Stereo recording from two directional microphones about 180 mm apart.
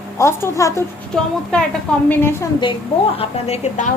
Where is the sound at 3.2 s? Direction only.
35° left (ahead or behind).